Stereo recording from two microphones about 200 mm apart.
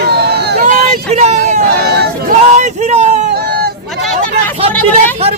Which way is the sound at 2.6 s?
35° right (ahead or behind).